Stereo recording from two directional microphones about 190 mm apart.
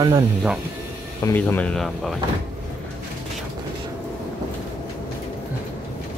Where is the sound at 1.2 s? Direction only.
10° left (ahead or behind).